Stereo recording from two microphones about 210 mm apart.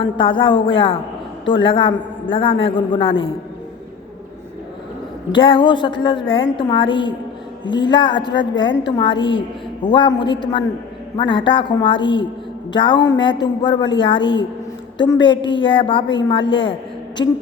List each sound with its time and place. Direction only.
0.0 s a man's voice: 25° left (ahead or behind)
5.3 s a man's voice: 25° left (ahead or behind)